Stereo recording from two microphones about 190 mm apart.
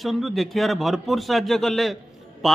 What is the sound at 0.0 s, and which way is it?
A man's voice, centre (ahead or behind).